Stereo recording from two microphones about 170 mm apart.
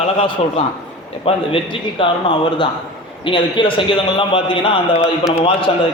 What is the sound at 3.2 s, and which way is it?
A man's voice, 30° left (ahead or behind).